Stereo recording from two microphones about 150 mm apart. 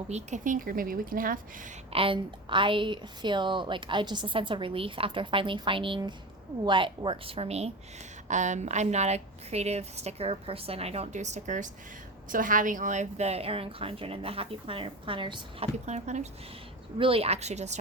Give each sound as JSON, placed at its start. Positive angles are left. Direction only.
{"t": 0.1, "sound": "speech", "side_deg": -50}
{"t": 1.9, "sound": "a woman's voice", "side_deg": -35}
{"t": 8.3, "sound": "a woman's voice", "side_deg": -55}
{"t": 15.9, "sound": "a woman's voice", "side_deg": -50}